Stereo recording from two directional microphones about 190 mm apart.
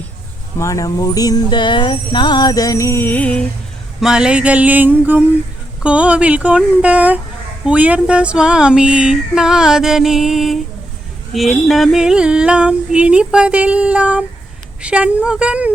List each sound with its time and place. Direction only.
0.6 s music: 15° left (ahead or behind)
4.0 s speech: 5° right (ahead or behind)
7.6 s a sound: 5° right (ahead or behind)